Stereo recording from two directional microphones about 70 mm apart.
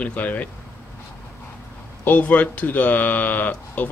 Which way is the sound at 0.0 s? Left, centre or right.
Left.